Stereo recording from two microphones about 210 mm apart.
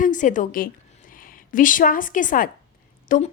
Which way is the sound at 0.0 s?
40° left (ahead or behind).